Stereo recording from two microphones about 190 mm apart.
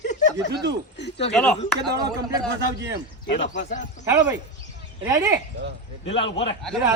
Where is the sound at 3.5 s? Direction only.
40° left (ahead or behind).